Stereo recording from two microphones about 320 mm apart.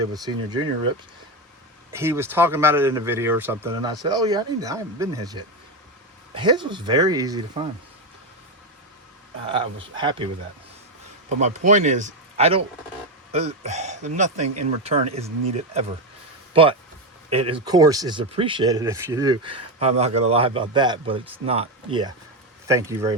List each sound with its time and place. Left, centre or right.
0.1 s speech: centre
1.9 s speech: centre
9.9 s speech: centre
11.3 s speech: right